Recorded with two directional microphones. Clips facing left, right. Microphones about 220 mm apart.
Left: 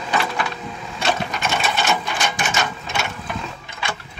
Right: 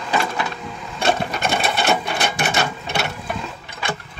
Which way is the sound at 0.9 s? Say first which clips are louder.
Right 3 dB; 55° right (ahead or behind).